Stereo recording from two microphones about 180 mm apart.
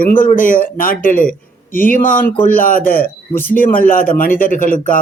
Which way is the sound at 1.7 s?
50° left (ahead or behind).